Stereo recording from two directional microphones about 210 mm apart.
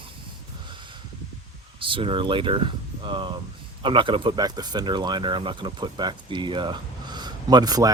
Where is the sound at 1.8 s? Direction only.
25° right (ahead or behind).